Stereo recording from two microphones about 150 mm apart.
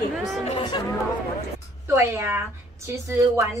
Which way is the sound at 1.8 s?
15° right (ahead or behind).